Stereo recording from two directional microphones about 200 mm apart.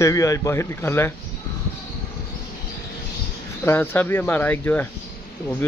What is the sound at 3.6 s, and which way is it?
Speech, 10° left (ahead or behind).